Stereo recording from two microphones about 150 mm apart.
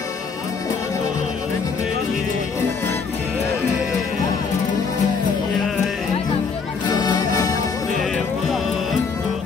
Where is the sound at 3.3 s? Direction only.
10° right (ahead or behind).